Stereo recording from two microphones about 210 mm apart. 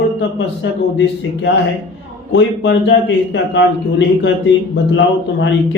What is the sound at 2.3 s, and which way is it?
A man's voice, 60° left (ahead or behind).